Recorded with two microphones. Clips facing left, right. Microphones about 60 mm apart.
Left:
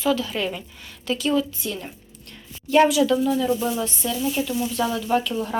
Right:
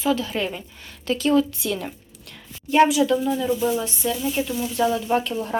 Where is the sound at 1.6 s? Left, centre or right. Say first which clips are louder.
Right 4 dB; right.